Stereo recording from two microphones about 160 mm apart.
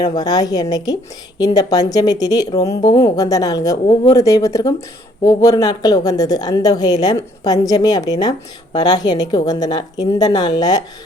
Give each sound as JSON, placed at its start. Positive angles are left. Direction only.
{"t": 0.2, "sound": "a woman's voice", "side_deg": 25}